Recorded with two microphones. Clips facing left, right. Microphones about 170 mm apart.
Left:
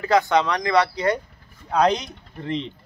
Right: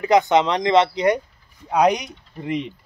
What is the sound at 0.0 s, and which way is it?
Speech, 20° right (ahead or behind).